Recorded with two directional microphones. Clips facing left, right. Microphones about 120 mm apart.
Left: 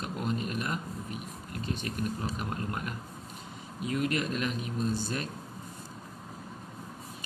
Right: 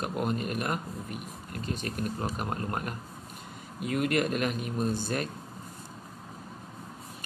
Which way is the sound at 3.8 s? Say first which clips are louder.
Right 3 dB; 55° right (ahead or behind).